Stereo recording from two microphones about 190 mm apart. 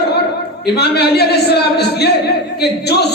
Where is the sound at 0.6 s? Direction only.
60° left (ahead or behind).